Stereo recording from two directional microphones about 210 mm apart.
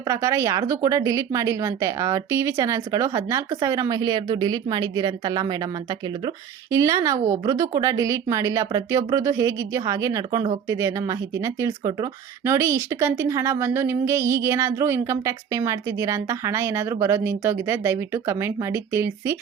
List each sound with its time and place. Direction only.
0.1 s speech: 15° right (ahead or behind)